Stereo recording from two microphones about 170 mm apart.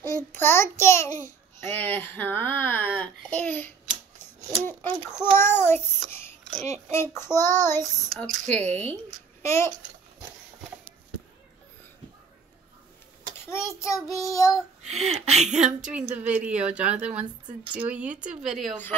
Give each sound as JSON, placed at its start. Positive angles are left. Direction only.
{"t": 0.0, "sound": "a child's voice", "side_deg": 15}
{"t": 5.2, "sound": "a child's voice", "side_deg": 15}
{"t": 6.5, "sound": "a child's voice", "side_deg": -45}
{"t": 6.9, "sound": "a child's voice", "side_deg": 15}
{"t": 9.4, "sound": "babbling", "side_deg": 15}
{"t": 13.5, "sound": "child singing", "side_deg": 15}
{"t": 14.9, "sound": "speech", "side_deg": -40}
{"t": 15.6, "sound": "a woman's voice", "side_deg": -5}